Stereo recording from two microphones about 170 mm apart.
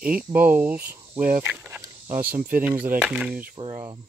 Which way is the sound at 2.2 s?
55° right (ahead or behind).